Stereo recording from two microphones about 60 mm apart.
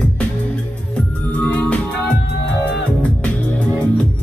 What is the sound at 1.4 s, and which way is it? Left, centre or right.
Music, left.